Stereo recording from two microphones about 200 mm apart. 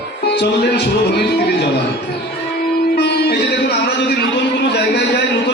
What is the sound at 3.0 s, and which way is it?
Music, 55° left (ahead or behind).